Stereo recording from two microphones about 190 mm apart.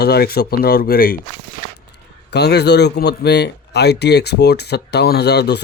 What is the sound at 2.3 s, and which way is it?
Speech, 60° left (ahead or behind).